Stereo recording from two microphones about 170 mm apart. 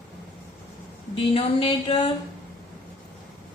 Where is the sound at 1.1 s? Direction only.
35° left (ahead or behind).